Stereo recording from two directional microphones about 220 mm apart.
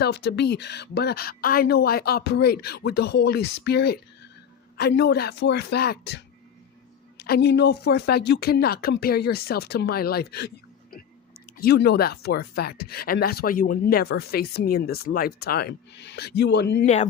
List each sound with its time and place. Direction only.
0.0 s speech: 50° left (ahead or behind)
16.8 s speech: 30° left (ahead or behind)